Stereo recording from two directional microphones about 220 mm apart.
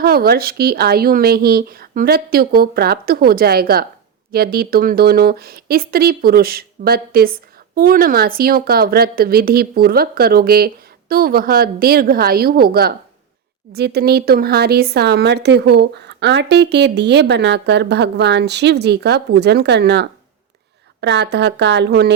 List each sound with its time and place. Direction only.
0.0 s speech: 45° right (ahead or behind)